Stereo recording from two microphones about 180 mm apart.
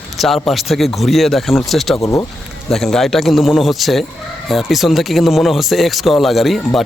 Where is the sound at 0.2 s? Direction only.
Centre (ahead or behind).